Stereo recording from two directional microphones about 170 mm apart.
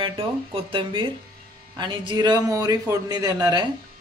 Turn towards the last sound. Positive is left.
turn(degrees=-20)  # may be behind; listen again after turning